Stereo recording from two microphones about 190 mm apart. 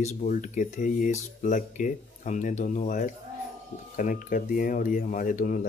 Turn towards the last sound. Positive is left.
turn(degrees=45)  # may be behind; listen again after turning